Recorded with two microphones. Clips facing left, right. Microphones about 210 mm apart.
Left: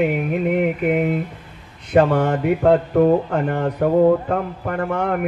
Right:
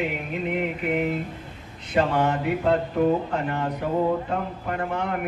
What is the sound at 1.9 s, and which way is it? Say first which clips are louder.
Speech: left 6 dB; 55° left (ahead or behind).